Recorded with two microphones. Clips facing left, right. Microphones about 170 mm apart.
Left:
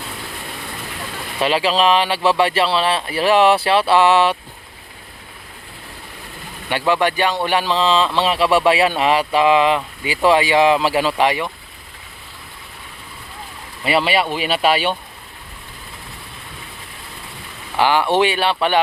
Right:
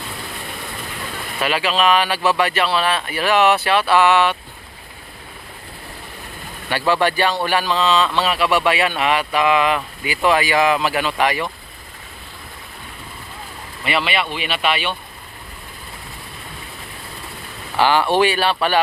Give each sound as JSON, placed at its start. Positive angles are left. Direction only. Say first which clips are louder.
{"t": 1.4, "sound": "speech", "louder": "left 3 dB", "side_deg": 30}
{"t": 6.7, "sound": "speech", "louder": "even", "side_deg": 20}
{"t": 13.8, "sound": "speech", "louder": "left 4 dB", "side_deg": 35}
{"t": 17.7, "sound": "speech", "louder": "even", "side_deg": 15}